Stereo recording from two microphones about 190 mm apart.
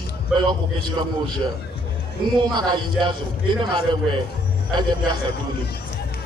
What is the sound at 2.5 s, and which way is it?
A man's voice, 20° right (ahead or behind).